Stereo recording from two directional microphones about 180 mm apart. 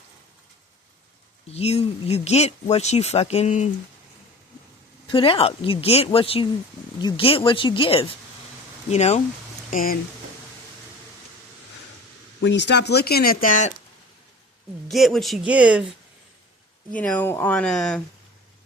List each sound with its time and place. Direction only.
1.5 s speech: 35° left (ahead or behind)
5.0 s speech: 30° left (ahead or behind)
9.6 s speech: 50° left (ahead or behind)
12.4 s speech: 80° left; by 13.7 s 45° left (ahead or behind)
14.8 s speech: centre (ahead or behind)
16.9 s speech: 5° left (ahead or behind)